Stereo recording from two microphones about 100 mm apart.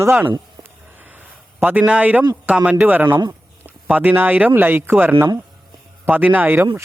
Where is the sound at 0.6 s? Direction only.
20° right (ahead or behind).